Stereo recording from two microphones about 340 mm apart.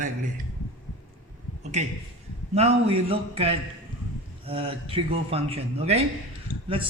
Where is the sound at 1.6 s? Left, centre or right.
Centre.